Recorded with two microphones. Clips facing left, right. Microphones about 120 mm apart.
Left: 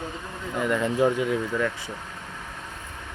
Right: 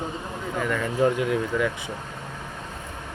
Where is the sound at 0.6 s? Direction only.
20° left (ahead or behind).